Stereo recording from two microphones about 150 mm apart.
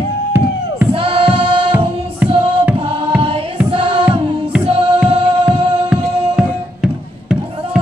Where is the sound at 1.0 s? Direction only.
35° right (ahead or behind).